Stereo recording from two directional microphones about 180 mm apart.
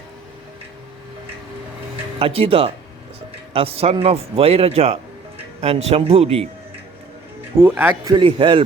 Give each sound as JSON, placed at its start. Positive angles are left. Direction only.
{"t": 2.1, "sound": "a man's voice", "side_deg": -35}
{"t": 7.8, "sound": "speech", "side_deg": -10}
{"t": 8.1, "sound": "a man's voice", "side_deg": -30}